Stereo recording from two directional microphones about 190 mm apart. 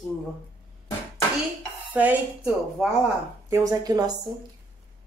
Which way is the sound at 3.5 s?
20° right (ahead or behind).